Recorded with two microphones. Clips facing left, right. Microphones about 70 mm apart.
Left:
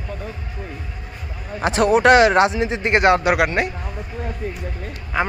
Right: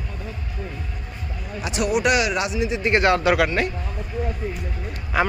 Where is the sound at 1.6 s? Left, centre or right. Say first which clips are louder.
Left 6 dB; left.